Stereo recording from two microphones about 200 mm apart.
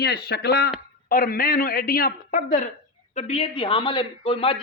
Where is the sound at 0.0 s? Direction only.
55° left (ahead or behind).